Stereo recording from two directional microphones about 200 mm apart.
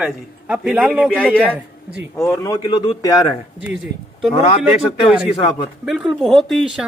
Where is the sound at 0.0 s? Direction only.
5° right (ahead or behind); by 3.3 s 20° left (ahead or behind).